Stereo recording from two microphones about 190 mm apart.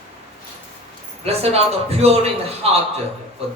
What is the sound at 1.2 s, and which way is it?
Speech, 35° right (ahead or behind).